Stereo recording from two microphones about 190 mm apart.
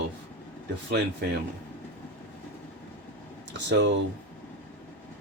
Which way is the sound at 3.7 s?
70° right (ahead or behind).